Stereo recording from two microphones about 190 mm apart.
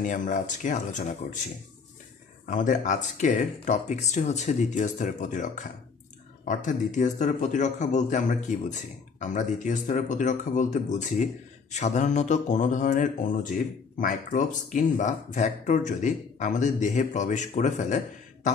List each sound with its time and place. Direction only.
0.0 s speech: 40° left (ahead or behind)
2.4 s speech: 40° left (ahead or behind)